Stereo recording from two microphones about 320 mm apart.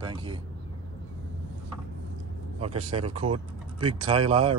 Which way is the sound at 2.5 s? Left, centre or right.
Centre.